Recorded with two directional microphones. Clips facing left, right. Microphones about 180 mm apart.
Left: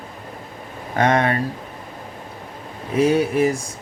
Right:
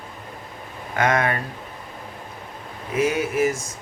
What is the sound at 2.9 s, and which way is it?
Speech, 35° left (ahead or behind).